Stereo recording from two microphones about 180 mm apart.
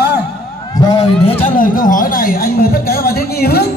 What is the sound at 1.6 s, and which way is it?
Speech, 50° left (ahead or behind).